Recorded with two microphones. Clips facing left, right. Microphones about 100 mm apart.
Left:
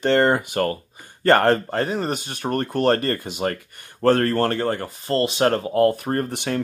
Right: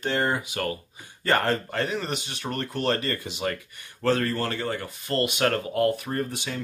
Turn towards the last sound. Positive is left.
turn(degrees=60)  # may be behind; listen again after turning